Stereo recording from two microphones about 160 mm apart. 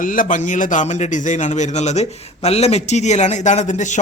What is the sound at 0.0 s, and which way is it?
A man's voice, 55° left (ahead or behind).